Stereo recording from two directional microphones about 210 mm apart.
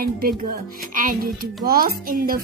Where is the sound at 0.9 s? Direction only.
40° right (ahead or behind).